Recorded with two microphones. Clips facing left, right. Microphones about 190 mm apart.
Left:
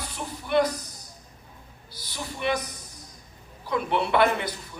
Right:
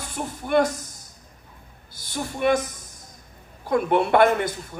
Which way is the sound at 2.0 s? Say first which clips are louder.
Right 7 dB; 50° right (ahead or behind).